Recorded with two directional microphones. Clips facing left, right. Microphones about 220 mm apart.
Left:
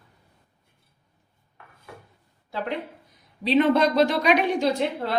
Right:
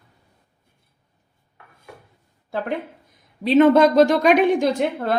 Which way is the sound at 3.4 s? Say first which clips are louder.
Right 6 dB; 45° right (ahead or behind).